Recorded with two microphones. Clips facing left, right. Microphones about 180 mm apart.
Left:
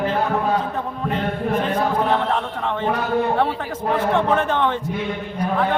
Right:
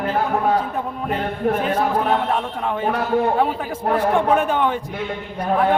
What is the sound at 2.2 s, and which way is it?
A man's voice, 10° right (ahead or behind).